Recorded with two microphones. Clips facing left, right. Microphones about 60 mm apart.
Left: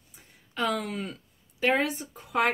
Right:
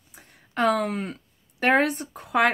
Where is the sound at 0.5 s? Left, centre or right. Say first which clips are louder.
Right 6 dB; right.